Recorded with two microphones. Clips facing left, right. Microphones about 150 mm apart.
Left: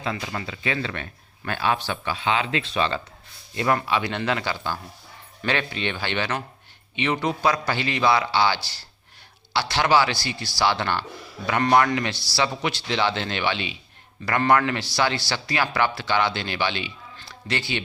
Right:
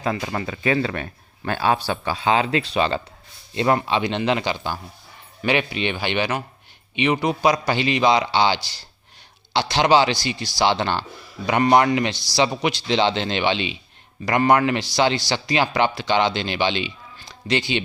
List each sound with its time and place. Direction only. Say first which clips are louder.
0.0 s a man's voice: right 5 dB; 40° right (ahead or behind); by 17.8 s 20° right (ahead or behind)